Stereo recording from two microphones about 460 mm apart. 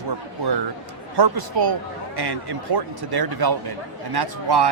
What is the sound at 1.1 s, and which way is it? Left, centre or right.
A man's voice, right.